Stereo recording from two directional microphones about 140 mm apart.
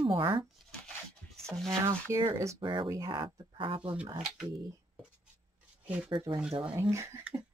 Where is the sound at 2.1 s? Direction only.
20° right (ahead or behind).